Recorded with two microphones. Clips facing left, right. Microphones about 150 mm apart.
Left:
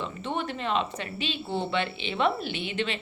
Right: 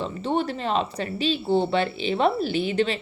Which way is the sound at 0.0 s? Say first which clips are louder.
Right 6 dB; 35° right (ahead or behind).